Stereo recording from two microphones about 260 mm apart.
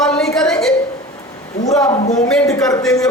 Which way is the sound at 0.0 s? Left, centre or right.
Centre.